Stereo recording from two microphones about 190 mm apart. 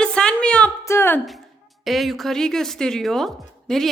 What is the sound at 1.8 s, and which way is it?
Speech, centre (ahead or behind).